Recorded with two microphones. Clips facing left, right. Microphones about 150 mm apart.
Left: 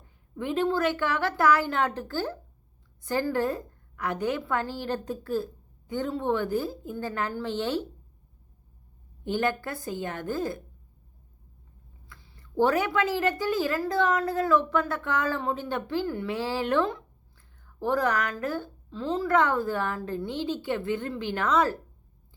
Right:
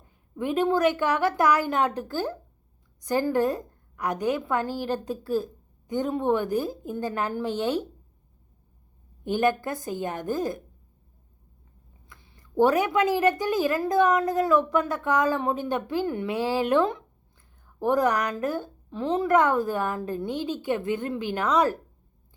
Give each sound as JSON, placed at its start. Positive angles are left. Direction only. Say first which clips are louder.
{"t": 0.3, "sound": "a woman's voice", "louder": "right 3 dB", "side_deg": -15}
{"t": 9.2, "sound": "a woman's voice", "louder": "right 4 dB", "side_deg": -15}
{"t": 12.0, "sound": "a woman's voice", "louder": "even", "side_deg": -15}